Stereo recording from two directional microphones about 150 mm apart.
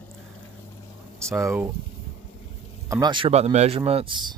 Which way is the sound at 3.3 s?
45° right (ahead or behind).